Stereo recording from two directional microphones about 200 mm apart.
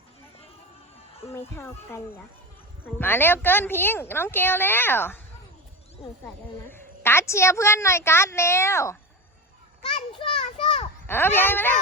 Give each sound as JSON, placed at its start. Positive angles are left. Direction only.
{"t": 1.2, "sound": "a woman's voice", "side_deg": 15}
{"t": 3.0, "sound": "a woman's voice", "side_deg": 10}
{"t": 6.7, "sound": "a woman's voice", "side_deg": 10}
{"t": 9.9, "sound": "children playing", "side_deg": 25}
{"t": 11.0, "sound": "a woman's voice", "side_deg": 10}